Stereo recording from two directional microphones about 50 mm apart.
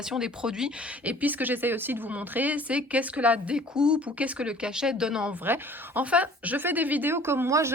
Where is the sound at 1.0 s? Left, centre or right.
Right; by 5.3 s centre.